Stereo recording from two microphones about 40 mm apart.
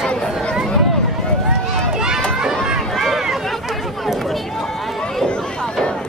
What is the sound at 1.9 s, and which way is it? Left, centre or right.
Run, centre.